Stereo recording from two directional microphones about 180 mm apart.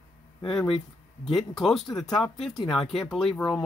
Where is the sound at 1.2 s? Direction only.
Centre (ahead or behind).